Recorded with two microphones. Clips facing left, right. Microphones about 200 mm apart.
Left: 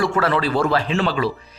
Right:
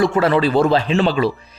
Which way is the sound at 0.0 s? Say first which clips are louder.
Right 4 dB; 20° right (ahead or behind).